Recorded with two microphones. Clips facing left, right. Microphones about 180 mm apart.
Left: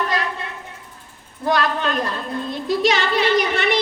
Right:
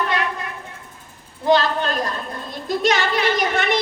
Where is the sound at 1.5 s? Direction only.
20° right (ahead or behind).